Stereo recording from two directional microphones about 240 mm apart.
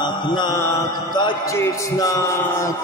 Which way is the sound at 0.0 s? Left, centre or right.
Centre.